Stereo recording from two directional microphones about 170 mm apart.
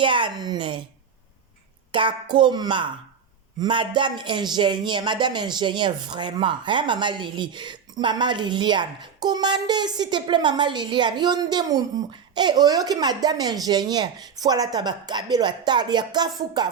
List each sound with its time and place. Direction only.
0.0 s speech: 30° right (ahead or behind)
1.9 s speech: 30° right (ahead or behind)